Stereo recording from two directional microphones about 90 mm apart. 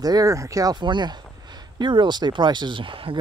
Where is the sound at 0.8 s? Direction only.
60° right (ahead or behind).